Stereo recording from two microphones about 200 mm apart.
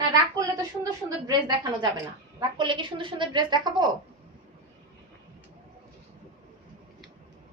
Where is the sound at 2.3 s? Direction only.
25° right (ahead or behind).